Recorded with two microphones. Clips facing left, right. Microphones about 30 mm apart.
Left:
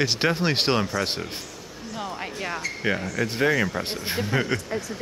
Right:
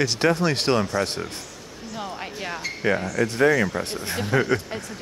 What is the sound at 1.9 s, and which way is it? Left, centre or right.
Speech, centre.